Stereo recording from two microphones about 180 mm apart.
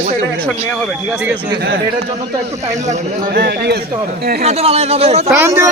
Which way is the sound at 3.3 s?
60° right (ahead or behind).